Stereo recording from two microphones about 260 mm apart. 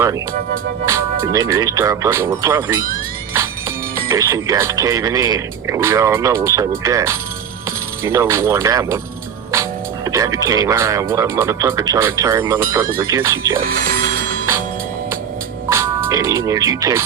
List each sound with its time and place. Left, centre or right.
0.9 s speech: centre
4.1 s speech: centre
10.1 s music: centre
10.4 s speech: centre
13.6 s music: right
15.7 s speech: centre